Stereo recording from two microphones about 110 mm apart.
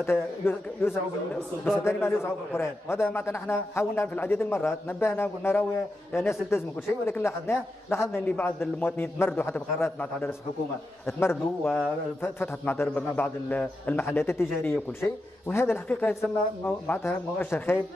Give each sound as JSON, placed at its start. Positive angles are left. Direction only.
{"t": 0.0, "sound": "a man's voice", "side_deg": 20}